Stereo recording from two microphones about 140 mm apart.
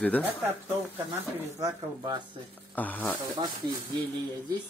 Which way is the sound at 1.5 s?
30° right (ahead or behind).